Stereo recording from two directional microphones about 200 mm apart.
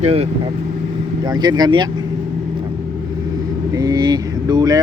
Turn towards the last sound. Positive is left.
turn(degrees=-20)  # may be behind; listen again after turning